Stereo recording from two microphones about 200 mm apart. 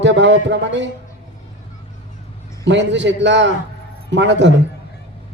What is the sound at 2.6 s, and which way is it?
A man's voice, 65° right (ahead or behind).